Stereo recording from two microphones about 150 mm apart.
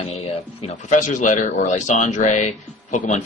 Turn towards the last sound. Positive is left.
turn(degrees=55)  # may be behind; listen again after turning